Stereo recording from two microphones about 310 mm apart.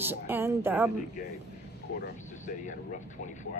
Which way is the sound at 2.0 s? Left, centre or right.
Left.